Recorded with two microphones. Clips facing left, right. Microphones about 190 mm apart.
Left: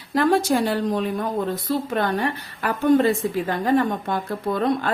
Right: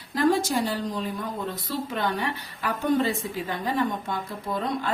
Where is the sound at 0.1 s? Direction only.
65° left (ahead or behind).